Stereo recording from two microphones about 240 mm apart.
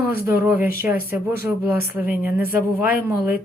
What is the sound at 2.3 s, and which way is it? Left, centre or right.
A woman's voice, left.